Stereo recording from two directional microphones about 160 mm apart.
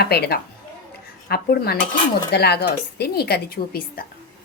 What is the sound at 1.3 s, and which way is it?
Speech, 80° left.